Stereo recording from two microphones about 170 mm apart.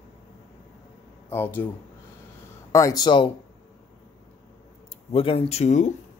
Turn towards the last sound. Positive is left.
turn(degrees=45)  # may be behind; listen again after turning